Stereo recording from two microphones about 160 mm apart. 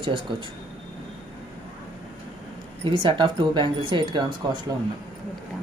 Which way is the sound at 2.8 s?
30° right (ahead or behind).